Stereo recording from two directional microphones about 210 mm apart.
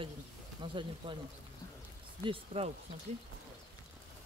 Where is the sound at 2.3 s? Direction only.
30° right (ahead or behind).